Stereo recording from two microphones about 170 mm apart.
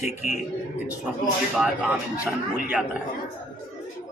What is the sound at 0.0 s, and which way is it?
Speech, 40° left (ahead or behind).